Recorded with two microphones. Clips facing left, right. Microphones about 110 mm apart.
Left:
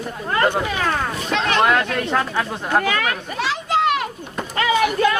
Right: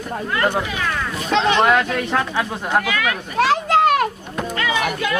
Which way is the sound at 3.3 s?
50° right (ahead or behind).